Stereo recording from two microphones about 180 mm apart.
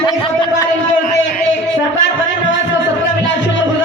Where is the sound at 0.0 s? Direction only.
25° left (ahead or behind).